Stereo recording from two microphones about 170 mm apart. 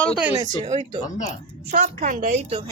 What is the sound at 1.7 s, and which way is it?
A woman's voice, 45° right (ahead or behind).